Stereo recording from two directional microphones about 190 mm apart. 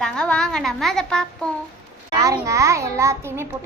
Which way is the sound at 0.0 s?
5° left (ahead or behind).